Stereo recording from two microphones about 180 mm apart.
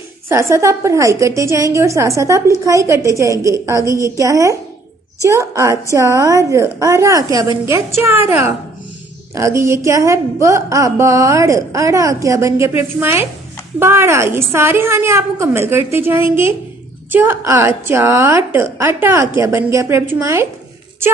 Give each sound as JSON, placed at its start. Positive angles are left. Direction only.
{"t": 0.3, "sound": "a woman's voice", "side_deg": -15}